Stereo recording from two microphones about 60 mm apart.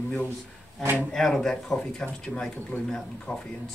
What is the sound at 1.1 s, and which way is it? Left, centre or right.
Speech, centre.